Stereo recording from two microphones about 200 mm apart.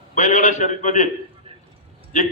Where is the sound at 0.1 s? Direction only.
35° left (ahead or behind).